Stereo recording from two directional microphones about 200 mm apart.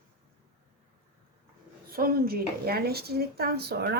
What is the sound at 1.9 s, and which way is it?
Speech, 45° right (ahead or behind).